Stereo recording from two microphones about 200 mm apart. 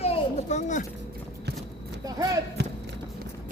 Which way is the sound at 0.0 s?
35° left (ahead or behind).